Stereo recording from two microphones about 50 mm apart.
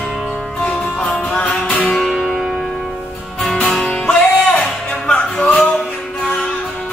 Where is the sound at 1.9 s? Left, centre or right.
Centre.